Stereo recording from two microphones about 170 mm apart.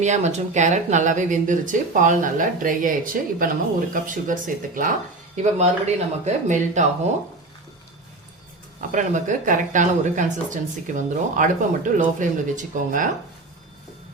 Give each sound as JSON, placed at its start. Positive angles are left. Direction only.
{"t": 0.0, "sound": "speech", "side_deg": -40}
{"t": 8.9, "sound": "speech", "side_deg": -50}